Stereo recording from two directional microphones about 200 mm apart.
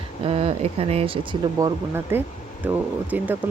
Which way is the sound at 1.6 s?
10° right (ahead or behind).